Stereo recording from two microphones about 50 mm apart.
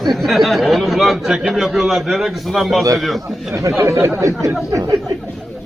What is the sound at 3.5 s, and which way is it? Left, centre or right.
Speech, right.